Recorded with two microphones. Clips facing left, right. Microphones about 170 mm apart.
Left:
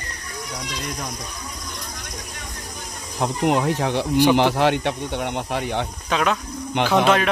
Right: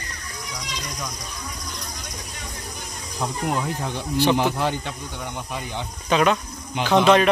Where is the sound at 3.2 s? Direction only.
70° left (ahead or behind).